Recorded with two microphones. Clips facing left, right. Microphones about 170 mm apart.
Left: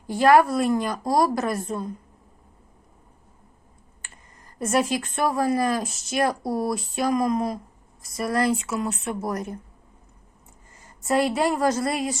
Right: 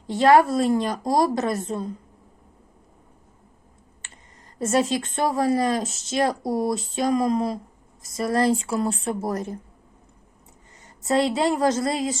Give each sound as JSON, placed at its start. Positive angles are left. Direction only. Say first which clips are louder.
{"t": 0.1, "sound": "speech", "louder": "right 1 dB", "side_deg": -25}
{"t": 4.6, "sound": "speech", "louder": "right 1 dB", "side_deg": -25}
{"t": 11.0, "sound": "speech", "louder": "right 1 dB", "side_deg": -25}